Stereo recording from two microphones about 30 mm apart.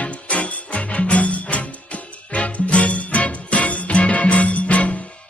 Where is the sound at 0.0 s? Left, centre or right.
Left.